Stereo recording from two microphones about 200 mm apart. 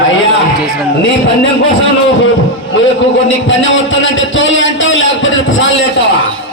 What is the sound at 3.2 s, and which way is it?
A man's voice, 70° left (ahead or behind).